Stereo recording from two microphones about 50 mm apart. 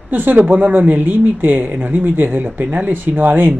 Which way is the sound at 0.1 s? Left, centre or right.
Right.